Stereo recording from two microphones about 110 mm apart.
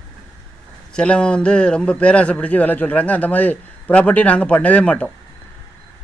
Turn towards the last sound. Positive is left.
turn(degrees=10)  # may be behind; listen again after turning